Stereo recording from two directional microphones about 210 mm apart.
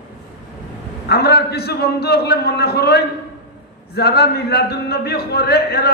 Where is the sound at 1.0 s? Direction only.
50° left (ahead or behind).